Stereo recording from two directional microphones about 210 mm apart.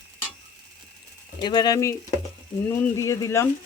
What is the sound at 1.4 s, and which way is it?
Speech, 20° left (ahead or behind).